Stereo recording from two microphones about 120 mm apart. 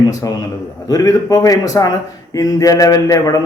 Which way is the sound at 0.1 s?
30° left (ahead or behind).